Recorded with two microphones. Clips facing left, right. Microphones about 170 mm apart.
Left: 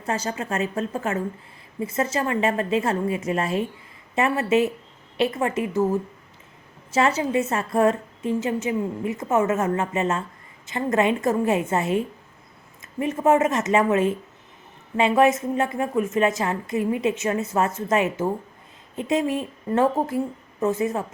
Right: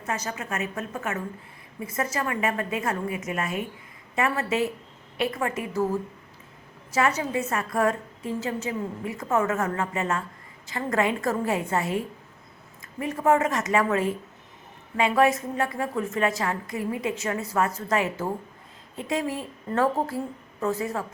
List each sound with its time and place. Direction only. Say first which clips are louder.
0.0 s a woman's voice: left 4 dB; 30° left (ahead or behind)